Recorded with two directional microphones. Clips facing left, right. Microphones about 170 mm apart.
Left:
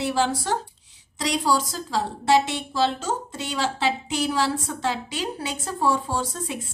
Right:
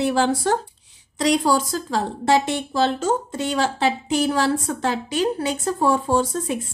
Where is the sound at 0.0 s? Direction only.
55° right (ahead or behind).